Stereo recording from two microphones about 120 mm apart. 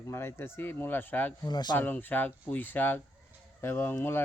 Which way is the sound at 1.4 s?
35° left (ahead or behind).